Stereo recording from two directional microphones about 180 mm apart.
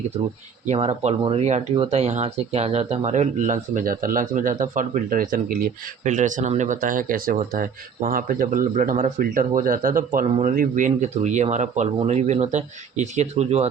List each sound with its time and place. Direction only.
0.7 s speech: 35° right (ahead or behind)